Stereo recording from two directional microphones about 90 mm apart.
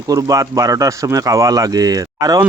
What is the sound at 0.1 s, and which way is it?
Speech, 40° right (ahead or behind).